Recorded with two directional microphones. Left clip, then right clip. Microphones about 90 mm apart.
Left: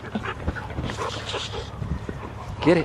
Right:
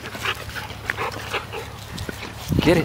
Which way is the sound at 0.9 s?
60° right (ahead or behind).